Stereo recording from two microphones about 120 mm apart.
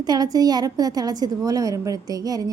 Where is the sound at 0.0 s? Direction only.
35° right (ahead or behind).